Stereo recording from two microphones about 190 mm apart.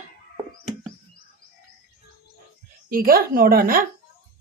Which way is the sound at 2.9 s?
50° right (ahead or behind).